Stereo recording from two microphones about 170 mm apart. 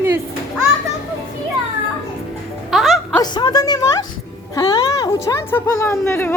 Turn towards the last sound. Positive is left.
turn(degrees=15)  # may be behind; listen again after turning